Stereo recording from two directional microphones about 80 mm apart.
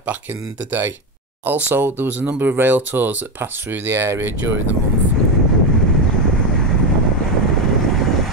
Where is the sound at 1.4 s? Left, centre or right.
Right.